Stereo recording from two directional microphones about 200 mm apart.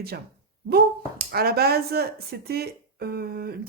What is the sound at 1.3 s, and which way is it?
Speech, 50° right (ahead or behind).